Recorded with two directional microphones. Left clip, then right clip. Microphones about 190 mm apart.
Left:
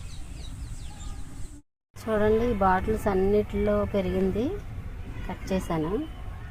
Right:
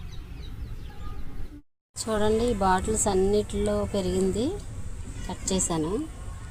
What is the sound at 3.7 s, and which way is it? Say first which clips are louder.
Speech: left 4 dB; 10° left (ahead or behind).